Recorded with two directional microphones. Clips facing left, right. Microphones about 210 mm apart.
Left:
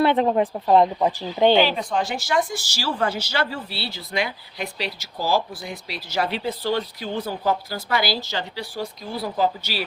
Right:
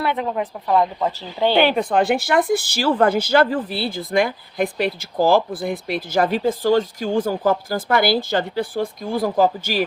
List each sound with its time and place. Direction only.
0.0 s speech: 30° left (ahead or behind)
0.9 s speech: 15° left (ahead or behind)
1.5 s speech: 55° right (ahead or behind)